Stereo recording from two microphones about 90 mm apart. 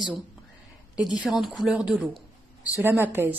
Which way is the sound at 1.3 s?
Centre (ahead or behind).